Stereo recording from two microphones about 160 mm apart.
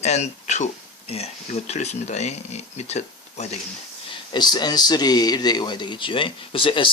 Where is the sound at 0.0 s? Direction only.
45° left (ahead or behind).